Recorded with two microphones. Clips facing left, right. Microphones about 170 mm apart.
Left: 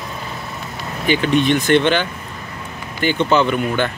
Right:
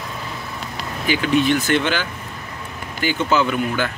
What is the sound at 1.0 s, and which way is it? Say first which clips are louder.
Speech: left 2 dB; 5° right (ahead or behind).